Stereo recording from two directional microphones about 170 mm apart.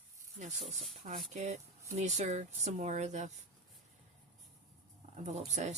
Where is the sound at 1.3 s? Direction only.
45° right (ahead or behind).